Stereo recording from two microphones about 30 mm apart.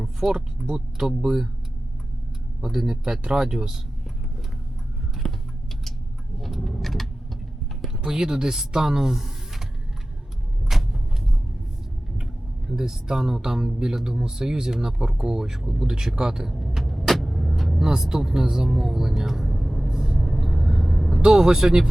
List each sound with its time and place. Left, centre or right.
0.0 s speech: right
2.6 s speech: centre
5.2 s tick-tock: centre
6.4 s vehicle: centre
8.0 s speech: right
10.7 s vehicle: centre
12.7 s speech: right
16.5 s vehicle: centre
18.1 s speech: centre
19.9 s vehicle: centre
20.1 s vehicle: centre
21.2 s speech: centre